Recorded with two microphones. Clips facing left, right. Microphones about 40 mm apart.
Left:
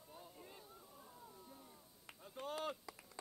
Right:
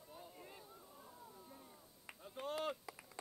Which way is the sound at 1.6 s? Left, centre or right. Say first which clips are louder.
Right 1 dB; centre.